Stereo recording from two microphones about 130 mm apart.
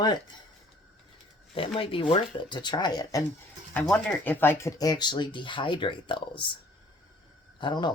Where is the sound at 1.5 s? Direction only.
45° left (ahead or behind); by 3.2 s 30° left (ahead or behind).